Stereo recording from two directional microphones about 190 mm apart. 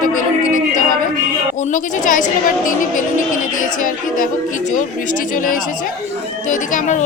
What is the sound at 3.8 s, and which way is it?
A woman's voice, 45° left (ahead or behind).